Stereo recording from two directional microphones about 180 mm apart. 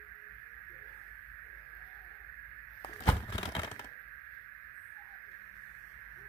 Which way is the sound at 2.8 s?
30° left (ahead or behind).